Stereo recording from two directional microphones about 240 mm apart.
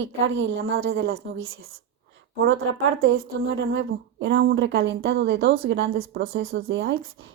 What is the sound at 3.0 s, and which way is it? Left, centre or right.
A woman's voice, right.